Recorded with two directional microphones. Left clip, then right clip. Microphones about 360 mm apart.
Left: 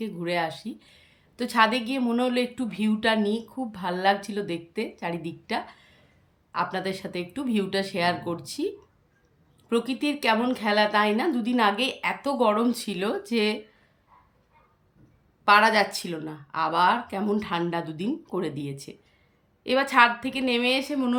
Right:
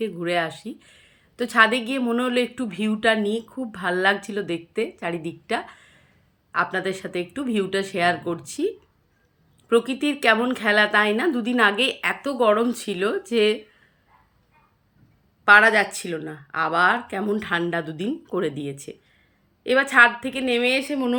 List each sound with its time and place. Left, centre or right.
0.0 s a woman's voice: centre
15.4 s a woman's voice: centre
20.2 s a woman's voice: centre